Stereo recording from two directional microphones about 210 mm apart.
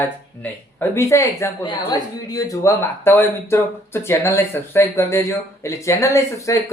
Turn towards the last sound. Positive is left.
turn(degrees=15)  # may be behind; listen again after turning